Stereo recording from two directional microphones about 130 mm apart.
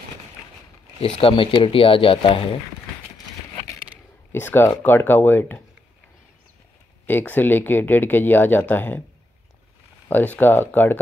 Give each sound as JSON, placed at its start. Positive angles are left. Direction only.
{"t": 1.0, "sound": "speech", "side_deg": 45}
{"t": 4.3, "sound": "speech", "side_deg": 20}
{"t": 7.1, "sound": "speech", "side_deg": 15}
{"t": 10.0, "sound": "speech", "side_deg": 15}